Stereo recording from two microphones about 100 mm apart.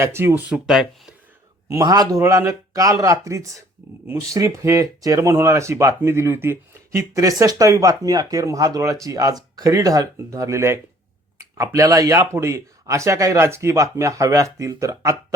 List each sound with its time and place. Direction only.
0.0 s speech: 25° right (ahead or behind); by 0.9 s 10° right (ahead or behind)
1.8 s speech: 40° right (ahead or behind)
2.1 s speech: 30° right (ahead or behind)